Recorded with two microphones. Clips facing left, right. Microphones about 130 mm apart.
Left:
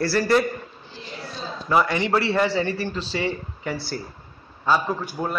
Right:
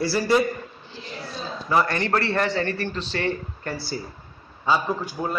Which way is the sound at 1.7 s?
10° left (ahead or behind).